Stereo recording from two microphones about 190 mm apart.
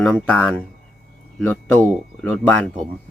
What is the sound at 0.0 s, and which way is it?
Speech, 5° left (ahead or behind).